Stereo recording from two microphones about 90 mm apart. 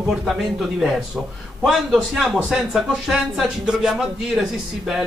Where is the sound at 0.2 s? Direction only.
Centre (ahead or behind).